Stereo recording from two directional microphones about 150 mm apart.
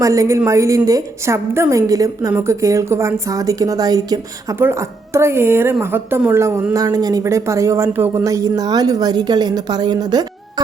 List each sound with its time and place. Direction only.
0.0 s a woman's voice: 20° right (ahead or behind)